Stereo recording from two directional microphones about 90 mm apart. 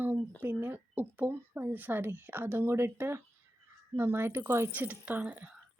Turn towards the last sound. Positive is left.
turn(degrees=-20)  # may be behind; listen again after turning